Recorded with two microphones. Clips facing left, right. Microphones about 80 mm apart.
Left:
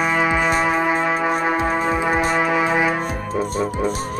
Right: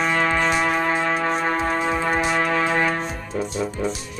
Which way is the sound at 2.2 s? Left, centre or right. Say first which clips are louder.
Left 2 dB; centre.